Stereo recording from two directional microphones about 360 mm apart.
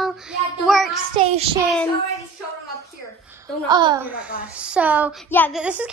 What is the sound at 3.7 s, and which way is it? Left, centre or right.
A woman's voice, centre.